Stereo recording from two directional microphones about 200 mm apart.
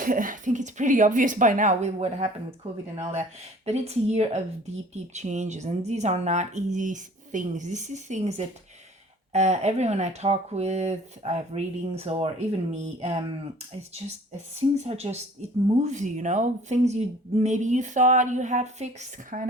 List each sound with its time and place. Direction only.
0.0 s speech: 45° right (ahead or behind)
3.7 s speech: 30° right (ahead or behind)
14.5 s speech: 30° right (ahead or behind)